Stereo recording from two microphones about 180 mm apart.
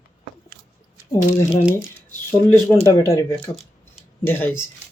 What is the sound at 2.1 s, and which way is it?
Speech, 15° left (ahead or behind).